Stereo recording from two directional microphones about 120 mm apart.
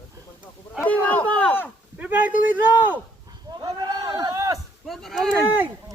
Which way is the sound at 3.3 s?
35° right (ahead or behind).